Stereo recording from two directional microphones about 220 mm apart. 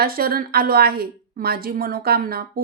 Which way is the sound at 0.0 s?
40° right (ahead or behind).